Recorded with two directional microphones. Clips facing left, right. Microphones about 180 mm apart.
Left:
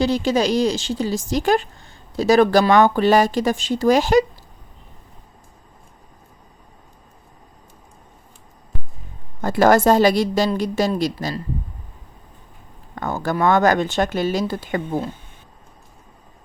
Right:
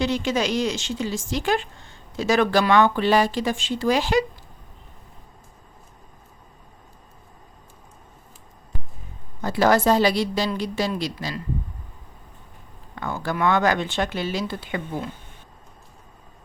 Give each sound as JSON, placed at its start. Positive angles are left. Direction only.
{"t": 0.0, "sound": "a woman's voice", "side_deg": 35}
{"t": 9.4, "sound": "speech", "side_deg": 50}
{"t": 13.0, "sound": "speech", "side_deg": 45}